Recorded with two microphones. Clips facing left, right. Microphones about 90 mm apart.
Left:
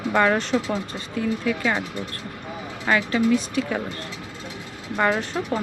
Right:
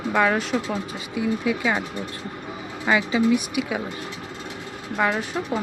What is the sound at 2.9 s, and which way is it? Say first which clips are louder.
Speech: even; 10° right (ahead or behind).